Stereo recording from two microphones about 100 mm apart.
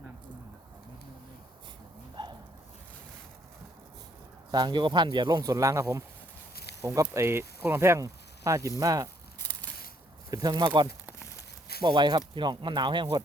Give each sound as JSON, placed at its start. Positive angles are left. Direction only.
{"t": 4.5, "sound": "speech", "side_deg": -50}
{"t": 10.3, "sound": "speech", "side_deg": -40}